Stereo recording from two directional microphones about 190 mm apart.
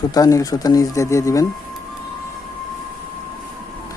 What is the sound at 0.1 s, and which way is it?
Speech, 20° left (ahead or behind).